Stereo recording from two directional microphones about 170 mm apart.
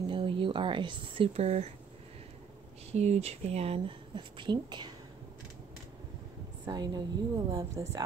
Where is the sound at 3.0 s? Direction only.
40° right (ahead or behind).